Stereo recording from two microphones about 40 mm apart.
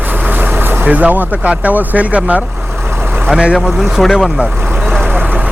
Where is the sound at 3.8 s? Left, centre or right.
Centre.